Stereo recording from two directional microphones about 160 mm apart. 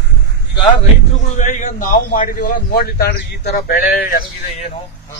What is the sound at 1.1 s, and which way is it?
A man's voice, 50° left (ahead or behind).